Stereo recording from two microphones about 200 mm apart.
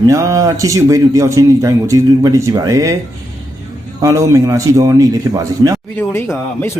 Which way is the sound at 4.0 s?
15° right (ahead or behind).